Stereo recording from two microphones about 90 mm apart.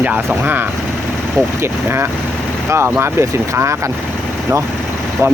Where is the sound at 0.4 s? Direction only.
20° right (ahead or behind).